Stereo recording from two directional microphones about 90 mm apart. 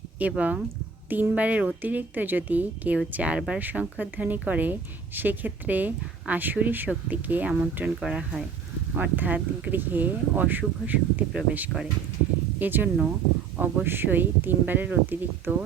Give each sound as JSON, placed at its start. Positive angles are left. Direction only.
{"t": 0.2, "sound": "speech", "side_deg": -15}